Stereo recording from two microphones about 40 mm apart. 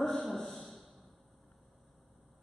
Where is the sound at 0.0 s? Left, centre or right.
Centre.